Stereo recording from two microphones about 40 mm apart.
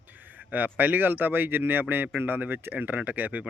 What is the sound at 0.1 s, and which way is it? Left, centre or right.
Speech, right.